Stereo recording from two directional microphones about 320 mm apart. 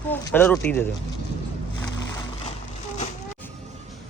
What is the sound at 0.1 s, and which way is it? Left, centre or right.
Speech, centre.